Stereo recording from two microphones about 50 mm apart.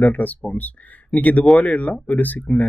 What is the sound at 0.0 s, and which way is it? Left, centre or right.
Speech, left.